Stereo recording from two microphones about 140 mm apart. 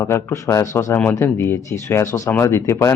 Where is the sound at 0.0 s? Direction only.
20° left (ahead or behind).